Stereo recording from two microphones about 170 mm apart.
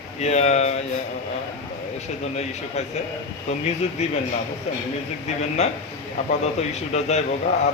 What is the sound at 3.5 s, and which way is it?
Speech, 40° left (ahead or behind).